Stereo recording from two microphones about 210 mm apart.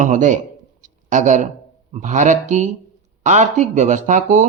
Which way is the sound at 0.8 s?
35° right (ahead or behind).